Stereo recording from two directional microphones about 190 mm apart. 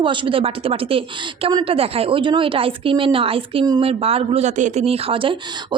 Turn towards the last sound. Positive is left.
turn(degrees=-25)  # may be behind; listen again after turning